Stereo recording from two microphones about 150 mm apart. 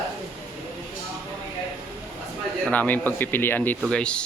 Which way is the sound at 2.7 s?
10° left (ahead or behind).